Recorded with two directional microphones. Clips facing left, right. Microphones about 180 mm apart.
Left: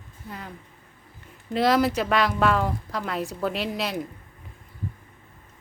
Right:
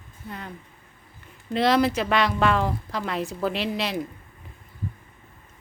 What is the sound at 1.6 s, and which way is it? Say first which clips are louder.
A woman's voice: even; centre (ahead or behind).